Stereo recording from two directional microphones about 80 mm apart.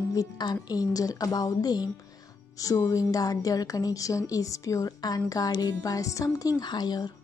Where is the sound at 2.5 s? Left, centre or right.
Left.